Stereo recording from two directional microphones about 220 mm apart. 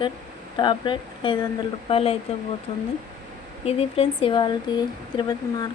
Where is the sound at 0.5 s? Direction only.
20° left (ahead or behind).